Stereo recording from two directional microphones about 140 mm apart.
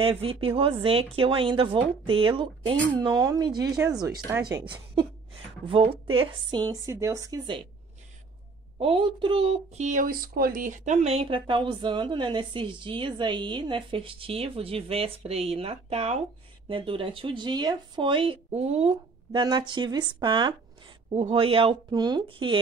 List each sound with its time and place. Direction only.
0.0 s speech: 40° right (ahead or behind)
3.0 s a woman's voice: 25° right (ahead or behind)
6.7 s speech: 20° right (ahead or behind)
8.7 s speech: 40° right (ahead or behind)
9.8 s speech: 80° right; by 19.4 s 45° right (ahead or behind)
19.7 s speech: 30° right (ahead or behind)
21.9 s speech: 30° right (ahead or behind)